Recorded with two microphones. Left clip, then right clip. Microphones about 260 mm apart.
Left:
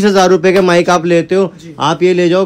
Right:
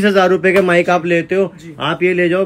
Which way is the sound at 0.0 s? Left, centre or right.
Centre.